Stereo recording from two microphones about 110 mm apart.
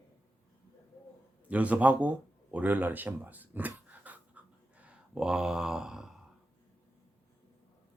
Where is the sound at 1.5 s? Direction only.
15° right (ahead or behind).